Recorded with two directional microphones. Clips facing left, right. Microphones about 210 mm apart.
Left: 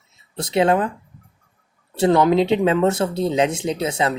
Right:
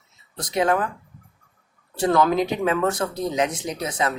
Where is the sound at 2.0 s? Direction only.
25° left (ahead or behind).